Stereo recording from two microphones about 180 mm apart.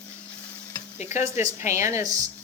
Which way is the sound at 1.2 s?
15° right (ahead or behind).